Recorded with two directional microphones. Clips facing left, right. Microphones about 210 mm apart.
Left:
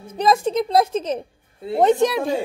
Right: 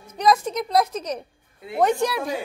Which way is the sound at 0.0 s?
30° left (ahead or behind).